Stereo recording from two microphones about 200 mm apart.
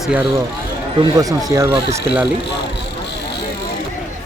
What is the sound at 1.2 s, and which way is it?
Speech, 15° right (ahead or behind).